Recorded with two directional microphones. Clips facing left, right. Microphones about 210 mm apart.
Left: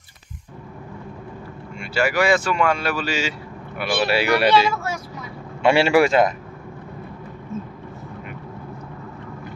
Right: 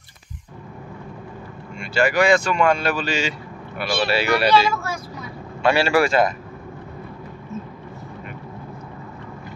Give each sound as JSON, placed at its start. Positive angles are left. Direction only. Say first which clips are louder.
{"t": 1.8, "sound": "speech", "louder": "right 2 dB", "side_deg": 5}
{"t": 4.5, "sound": "speech", "louder": "even", "side_deg": 20}